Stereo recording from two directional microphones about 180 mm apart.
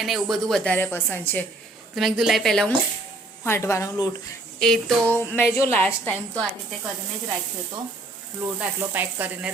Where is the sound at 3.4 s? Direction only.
15° left (ahead or behind).